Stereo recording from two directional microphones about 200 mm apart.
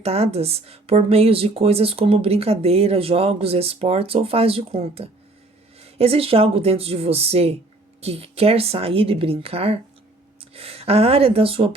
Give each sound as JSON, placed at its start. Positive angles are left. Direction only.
{"t": 0.0, "sound": "speech", "side_deg": -30}